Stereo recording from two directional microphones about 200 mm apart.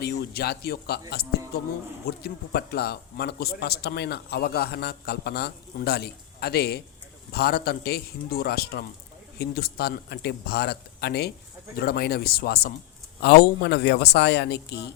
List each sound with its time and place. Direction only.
0.0 s a man's voice: 55° left (ahead or behind)